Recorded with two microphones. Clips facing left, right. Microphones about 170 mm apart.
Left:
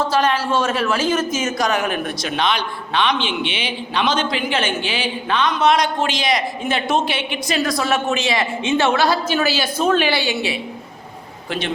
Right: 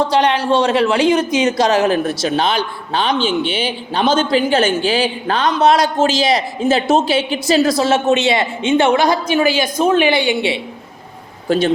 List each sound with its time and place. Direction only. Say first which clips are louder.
0.1 s a woman's voice: right 4 dB; 20° right (ahead or behind)
11.4 s a man's voice: right 10 dB; 40° right (ahead or behind)